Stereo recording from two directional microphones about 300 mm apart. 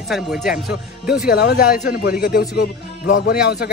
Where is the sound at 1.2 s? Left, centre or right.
Left.